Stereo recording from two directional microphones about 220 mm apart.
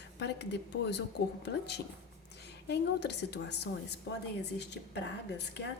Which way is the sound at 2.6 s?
50° left (ahead or behind).